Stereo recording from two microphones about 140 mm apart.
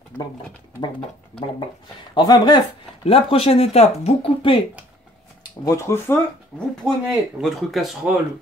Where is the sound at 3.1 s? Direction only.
40° left (ahead or behind).